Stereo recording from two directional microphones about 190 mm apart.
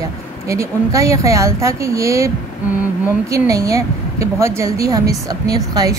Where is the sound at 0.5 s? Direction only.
15° right (ahead or behind).